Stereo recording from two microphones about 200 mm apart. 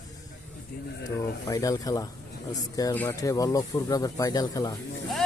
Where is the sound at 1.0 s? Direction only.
15° left (ahead or behind).